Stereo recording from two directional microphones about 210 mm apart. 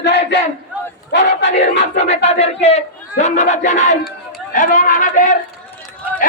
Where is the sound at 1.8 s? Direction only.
30° left (ahead or behind).